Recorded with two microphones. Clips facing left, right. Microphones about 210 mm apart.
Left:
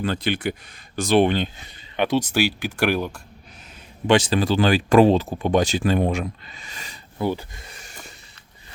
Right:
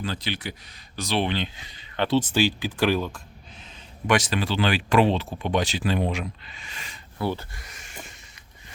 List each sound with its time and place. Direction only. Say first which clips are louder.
0.0 s speech: left 7 dB; 55° left (ahead or behind)
2.0 s speech: left 1 dB; 15° left (ahead or behind)
4.0 s speech: left 5 dB; 30° left (ahead or behind)
7.2 s speech: left 3 dB; 15° left (ahead or behind)
7.6 s a sound: even; 35° left (ahead or behind)